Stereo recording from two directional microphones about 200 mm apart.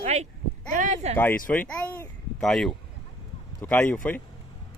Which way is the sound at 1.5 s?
10° left (ahead or behind).